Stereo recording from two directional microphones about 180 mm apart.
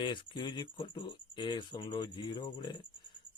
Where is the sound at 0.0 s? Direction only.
25° left (ahead or behind).